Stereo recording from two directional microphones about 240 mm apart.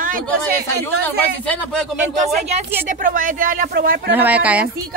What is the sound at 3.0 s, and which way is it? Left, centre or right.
Speech, right.